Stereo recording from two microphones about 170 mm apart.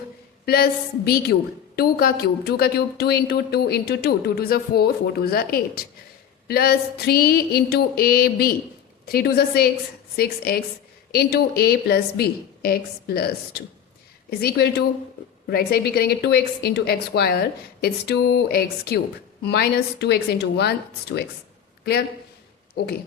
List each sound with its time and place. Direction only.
0.4 s a woman's voice: 65° left (ahead or behind)